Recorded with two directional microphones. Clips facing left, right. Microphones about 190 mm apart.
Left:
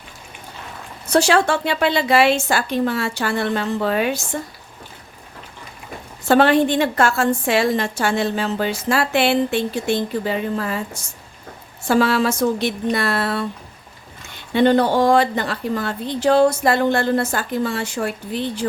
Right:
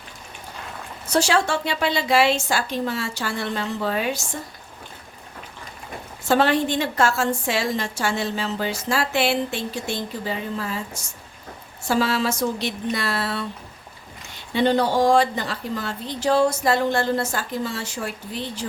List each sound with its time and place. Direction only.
1.1 s a woman's voice: 60° left (ahead or behind)
6.2 s a woman's voice: 60° left (ahead or behind)
11.9 s a woman's voice: 60° left (ahead or behind)
14.5 s a woman's voice: 55° left (ahead or behind)